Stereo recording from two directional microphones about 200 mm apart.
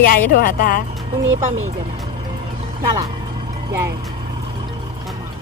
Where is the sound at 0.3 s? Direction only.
45° left (ahead or behind).